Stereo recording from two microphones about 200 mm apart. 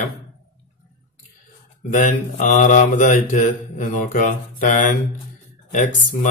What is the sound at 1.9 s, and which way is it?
Speech, 40° left (ahead or behind).